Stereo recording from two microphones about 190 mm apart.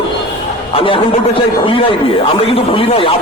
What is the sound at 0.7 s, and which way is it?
Speech, 25° left (ahead or behind).